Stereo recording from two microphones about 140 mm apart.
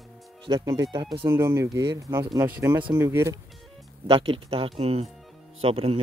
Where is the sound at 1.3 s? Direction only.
20° right (ahead or behind).